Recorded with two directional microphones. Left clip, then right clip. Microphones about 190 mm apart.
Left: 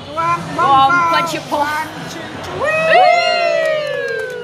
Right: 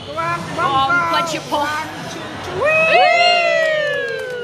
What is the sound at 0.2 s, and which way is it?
Vehicle, 50° left (ahead or behind).